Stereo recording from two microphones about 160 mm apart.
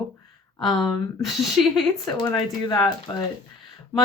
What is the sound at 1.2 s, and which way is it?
Speech, centre (ahead or behind).